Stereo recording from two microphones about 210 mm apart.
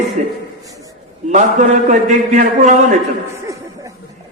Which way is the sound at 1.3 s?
35° right (ahead or behind).